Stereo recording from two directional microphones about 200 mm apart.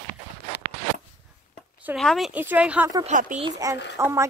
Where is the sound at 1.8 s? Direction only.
Centre (ahead or behind).